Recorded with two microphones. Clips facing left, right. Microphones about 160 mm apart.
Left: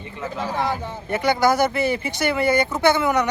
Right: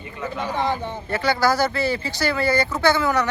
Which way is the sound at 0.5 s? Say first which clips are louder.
Right 1 dB; 5° left (ahead or behind).